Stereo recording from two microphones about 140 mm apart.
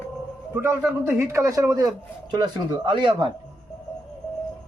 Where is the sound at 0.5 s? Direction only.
15° right (ahead or behind); by 3.3 s 35° right (ahead or behind).